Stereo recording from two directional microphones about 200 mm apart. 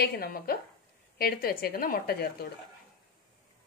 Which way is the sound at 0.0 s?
50° left (ahead or behind).